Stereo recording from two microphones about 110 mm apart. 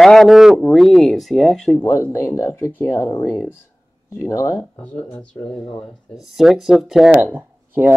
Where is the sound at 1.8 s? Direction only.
20° left (ahead or behind).